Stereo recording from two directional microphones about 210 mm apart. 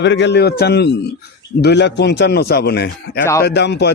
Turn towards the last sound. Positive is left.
turn(degrees=50)  # may be behind; listen again after turning